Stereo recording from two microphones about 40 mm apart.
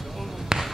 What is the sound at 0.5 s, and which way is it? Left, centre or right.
Basketball bounce, centre.